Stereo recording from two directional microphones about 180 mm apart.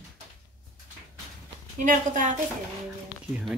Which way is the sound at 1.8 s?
45° right (ahead or behind).